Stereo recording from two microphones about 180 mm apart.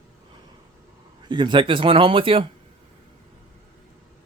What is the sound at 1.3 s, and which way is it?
Speech, 25° right (ahead or behind).